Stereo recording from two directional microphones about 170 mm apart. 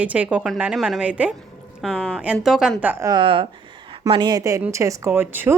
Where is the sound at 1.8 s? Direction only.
5° left (ahead or behind).